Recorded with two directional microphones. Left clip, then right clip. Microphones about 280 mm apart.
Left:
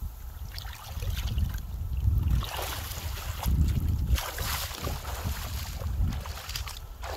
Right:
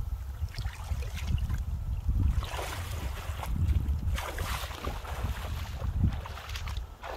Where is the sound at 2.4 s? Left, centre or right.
Left.